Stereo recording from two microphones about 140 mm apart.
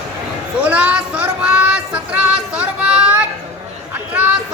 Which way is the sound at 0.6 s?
10° right (ahead or behind).